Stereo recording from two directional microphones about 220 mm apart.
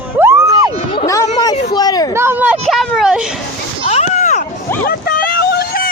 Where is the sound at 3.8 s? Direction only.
30° left (ahead or behind).